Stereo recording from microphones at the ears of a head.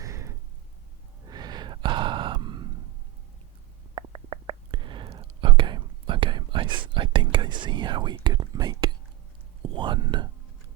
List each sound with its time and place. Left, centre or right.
0.0 s a sound: right
1.2 s sigh: right
3.9 s whispering: right